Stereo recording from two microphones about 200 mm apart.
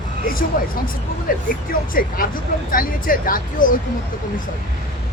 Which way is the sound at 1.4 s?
45° left (ahead or behind).